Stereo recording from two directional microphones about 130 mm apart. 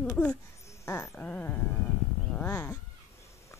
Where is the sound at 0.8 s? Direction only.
20° left (ahead or behind).